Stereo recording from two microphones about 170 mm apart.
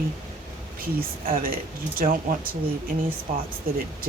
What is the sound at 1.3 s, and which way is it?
Speech, 55° right (ahead or behind).